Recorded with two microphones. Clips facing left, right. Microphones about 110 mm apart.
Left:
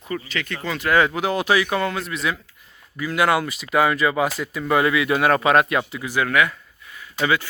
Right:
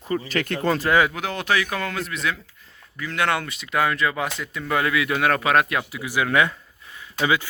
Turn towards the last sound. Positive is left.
turn(degrees=-15)  # may be behind; listen again after turning